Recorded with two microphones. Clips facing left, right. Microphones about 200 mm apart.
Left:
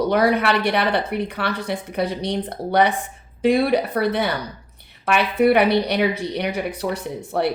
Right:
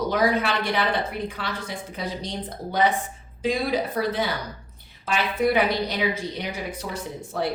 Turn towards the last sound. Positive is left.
turn(degrees=65)  # may be behind; listen again after turning